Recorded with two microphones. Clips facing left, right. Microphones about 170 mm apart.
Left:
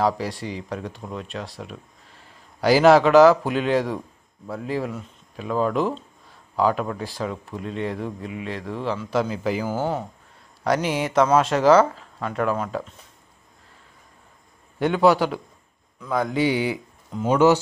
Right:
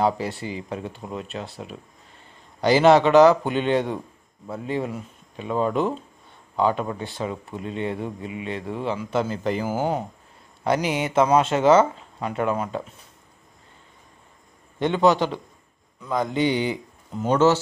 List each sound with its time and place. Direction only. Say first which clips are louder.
0.0 s speech: even; centre (ahead or behind)
9.7 s speech: right 1 dB; 15° right (ahead or behind)
10.6 s speech: even; centre (ahead or behind)
14.8 s a man's voice: left 1 dB; 5° left (ahead or behind)